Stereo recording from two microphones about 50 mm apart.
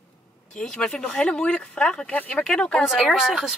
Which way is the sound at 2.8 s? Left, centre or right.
Centre.